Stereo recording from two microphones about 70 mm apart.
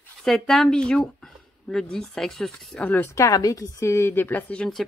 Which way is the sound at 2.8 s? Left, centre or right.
Left.